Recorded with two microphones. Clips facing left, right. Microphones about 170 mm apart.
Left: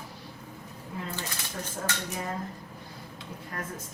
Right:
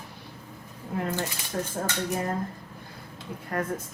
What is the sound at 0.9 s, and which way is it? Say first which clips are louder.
Speech: right 8 dB; 55° right (ahead or behind).